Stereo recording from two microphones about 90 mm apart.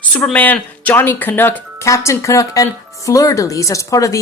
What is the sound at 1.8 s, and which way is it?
Speech, 35° left (ahead or behind).